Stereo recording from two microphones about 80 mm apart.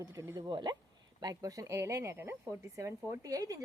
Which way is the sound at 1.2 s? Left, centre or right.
Right.